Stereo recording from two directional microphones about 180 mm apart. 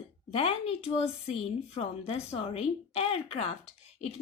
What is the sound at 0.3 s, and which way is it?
A woman's voice, 35° left (ahead or behind).